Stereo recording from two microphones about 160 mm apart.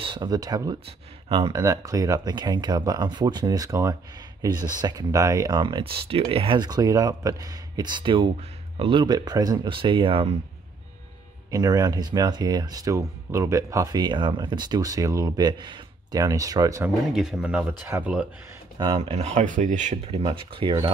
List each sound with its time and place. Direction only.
0.0 s speech: 30° right (ahead or behind)
11.5 s speech: 25° right (ahead or behind)
17.1 s speech: 5° right (ahead or behind)
18.8 s speech: 30° right (ahead or behind)
19.1 s speech: 45° right (ahead or behind)